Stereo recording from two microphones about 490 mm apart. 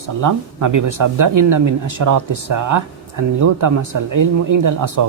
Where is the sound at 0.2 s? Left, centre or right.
Right.